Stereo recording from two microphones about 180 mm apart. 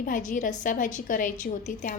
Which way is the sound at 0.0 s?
45° left (ahead or behind).